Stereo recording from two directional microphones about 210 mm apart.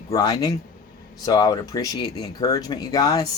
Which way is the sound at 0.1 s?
20° left (ahead or behind).